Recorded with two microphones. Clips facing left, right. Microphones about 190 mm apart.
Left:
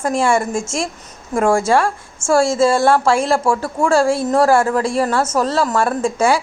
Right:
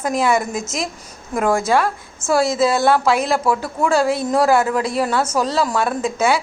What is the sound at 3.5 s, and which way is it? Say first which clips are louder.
Speech: left 1 dB; 25° left (ahead or behind).